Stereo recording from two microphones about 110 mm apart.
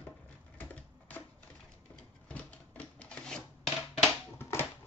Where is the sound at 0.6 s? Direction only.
15° left (ahead or behind).